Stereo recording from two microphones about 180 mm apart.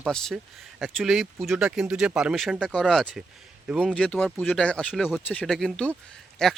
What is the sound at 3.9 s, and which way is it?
Speech, 5° left (ahead or behind).